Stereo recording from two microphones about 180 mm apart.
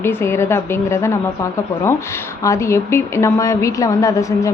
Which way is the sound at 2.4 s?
15° left (ahead or behind).